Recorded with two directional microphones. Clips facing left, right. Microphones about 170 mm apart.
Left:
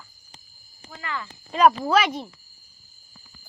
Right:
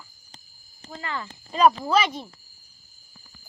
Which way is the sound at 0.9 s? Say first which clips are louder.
Right 1 dB; 30° right (ahead or behind).